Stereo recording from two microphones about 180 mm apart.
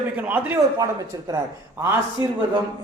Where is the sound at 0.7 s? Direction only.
20° right (ahead or behind).